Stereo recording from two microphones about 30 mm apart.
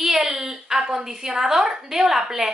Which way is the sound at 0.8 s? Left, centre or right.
Right.